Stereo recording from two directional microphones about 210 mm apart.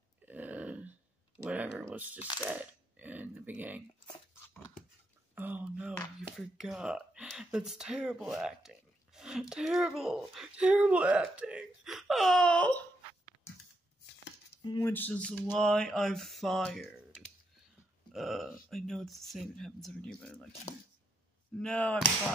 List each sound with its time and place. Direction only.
0.2 s burping: 5° right (ahead or behind)
1.4 s speech: 5° right (ahead or behind)
2.1 s speech: 20° left (ahead or behind)
2.4 s speech: 10° right (ahead or behind)
5.3 s speech: 10° right (ahead or behind); by 12.8 s 5° left (ahead or behind)
14.6 s speech: 15° left (ahead or behind)
18.1 s speech: centre (ahead or behind)
21.5 s speech: 5° left (ahead or behind)